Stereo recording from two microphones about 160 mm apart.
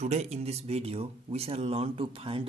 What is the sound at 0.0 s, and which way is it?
Speech, 45° right (ahead or behind).